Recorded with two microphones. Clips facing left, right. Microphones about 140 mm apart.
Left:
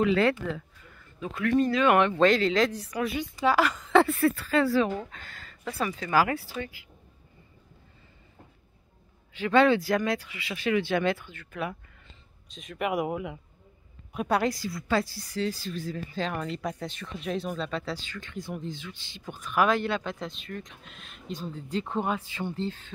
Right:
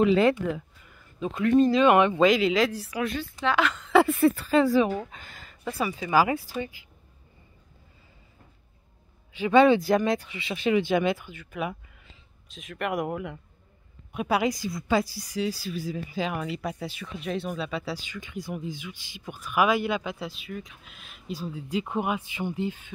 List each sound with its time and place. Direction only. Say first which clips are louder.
0.0 s a woman's voice: right 3 dB; 20° right (ahead or behind); by 4.0 s centre (ahead or behind)
4.2 s speech: right 3 dB; 20° right (ahead or behind)
9.3 s speech: right 3 dB; 15° right (ahead or behind)
12.4 s speech: left 1 dB; centre (ahead or behind)
14.5 s speech: right 2 dB; 20° right (ahead or behind)